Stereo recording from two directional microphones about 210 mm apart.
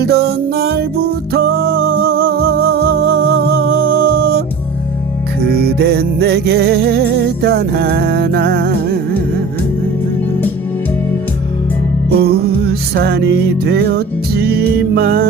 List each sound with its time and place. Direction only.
0.0 s music: 50° right (ahead or behind)
5.5 s music: 50° right (ahead or behind)
12.1 s music: 50° right (ahead or behind)